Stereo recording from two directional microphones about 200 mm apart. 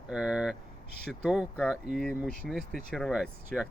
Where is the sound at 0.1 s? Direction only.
5° right (ahead or behind).